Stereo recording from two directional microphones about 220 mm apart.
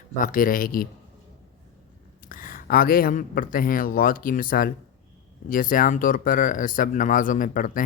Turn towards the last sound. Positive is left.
turn(degrees=40)  # may be behind; listen again after turning